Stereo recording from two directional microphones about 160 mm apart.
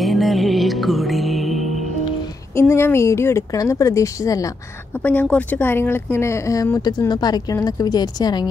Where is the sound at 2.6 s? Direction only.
15° left (ahead or behind).